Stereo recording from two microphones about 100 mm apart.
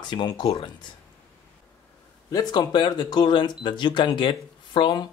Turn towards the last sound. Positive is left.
turn(degrees=50)  # may be behind; listen again after turning